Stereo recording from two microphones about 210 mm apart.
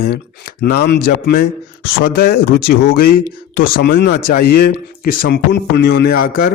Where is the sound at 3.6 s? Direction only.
45° left (ahead or behind).